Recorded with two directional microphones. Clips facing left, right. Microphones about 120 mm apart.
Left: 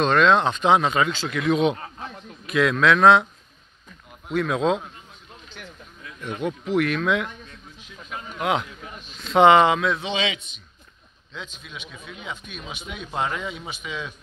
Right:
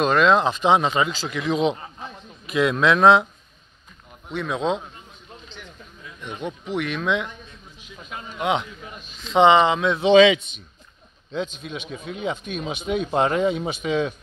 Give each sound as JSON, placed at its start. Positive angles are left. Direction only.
{"t": 0.0, "sound": "a man's voice", "side_deg": -5}
{"t": 4.3, "sound": "speech", "side_deg": 5}
{"t": 6.4, "sound": "speech", "side_deg": 0}
{"t": 8.4, "sound": "speech", "side_deg": 0}
{"t": 11.5, "sound": "a man's voice", "side_deg": -25}
{"t": 11.9, "sound": "a man's voice", "side_deg": -40}
{"t": 12.5, "sound": "a man's voice", "side_deg": -25}